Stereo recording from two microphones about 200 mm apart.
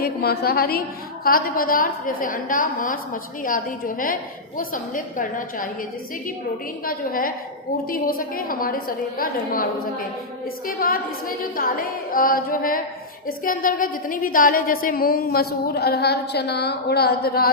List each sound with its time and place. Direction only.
0.0 s a woman's voice: 50° left (ahead or behind)
6.8 s a woman's voice: 45° left (ahead or behind)
10.7 s a woman's voice: 45° left (ahead or behind)